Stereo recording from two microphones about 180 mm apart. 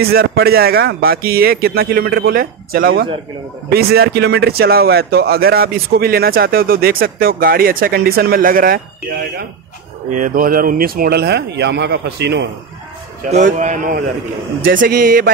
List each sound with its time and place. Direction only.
0.0 s speech: 55° right (ahead or behind)
10.1 s speech: 50° right (ahead or behind); by 12.4 s 65° right (ahead or behind)
13.3 s a man's voice: 45° right (ahead or behind)